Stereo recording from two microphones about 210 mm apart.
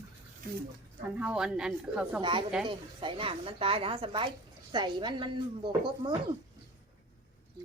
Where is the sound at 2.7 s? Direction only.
25° right (ahead or behind).